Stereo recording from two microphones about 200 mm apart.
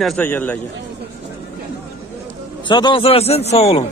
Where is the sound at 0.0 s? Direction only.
5° left (ahead or behind).